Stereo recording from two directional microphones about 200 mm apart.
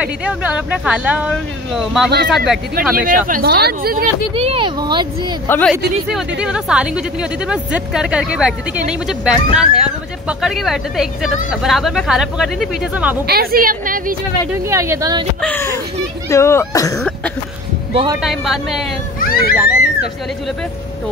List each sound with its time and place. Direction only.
0.0 s a woman's voice: 5° right (ahead or behind)
2.9 s speech: 45° right (ahead or behind)
4.4 s speech: 25° right (ahead or behind)
5.5 s a woman's voice: 5° left (ahead or behind)
6.4 s a woman's voice: 5° right (ahead or behind)
13.3 s speech: 50° right (ahead or behind)
14.5 s speech: 15° right (ahead or behind)
15.4 s speech: 10° left (ahead or behind)
17.9 s speech: 20° right (ahead or behind)
18.2 s a woman's voice: centre (ahead or behind)
19.1 s speech: 45° left (ahead or behind)
19.5 s speech: 10° right (ahead or behind)